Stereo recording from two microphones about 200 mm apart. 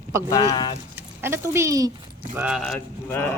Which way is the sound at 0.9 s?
10° right (ahead or behind).